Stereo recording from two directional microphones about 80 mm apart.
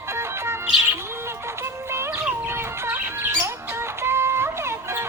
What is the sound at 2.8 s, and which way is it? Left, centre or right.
Bird, right.